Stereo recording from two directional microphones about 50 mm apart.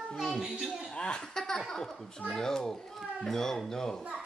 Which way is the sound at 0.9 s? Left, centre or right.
Centre.